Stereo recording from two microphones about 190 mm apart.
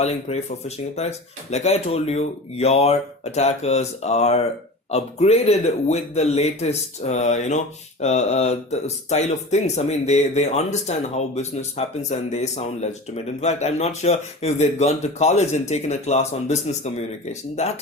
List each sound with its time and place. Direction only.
0.0 s speech: 35° left (ahead or behind)
12.0 s speech: 35° left (ahead or behind)